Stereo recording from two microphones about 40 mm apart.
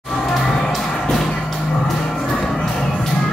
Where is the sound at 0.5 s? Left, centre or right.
Centre.